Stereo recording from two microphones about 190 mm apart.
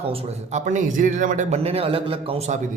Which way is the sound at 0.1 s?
35° right (ahead or behind).